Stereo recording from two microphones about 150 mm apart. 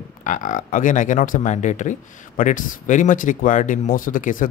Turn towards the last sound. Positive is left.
turn(degrees=65)  # may be behind; listen again after turning